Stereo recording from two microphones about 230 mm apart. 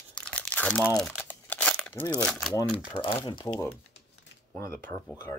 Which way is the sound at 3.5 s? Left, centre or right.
Centre.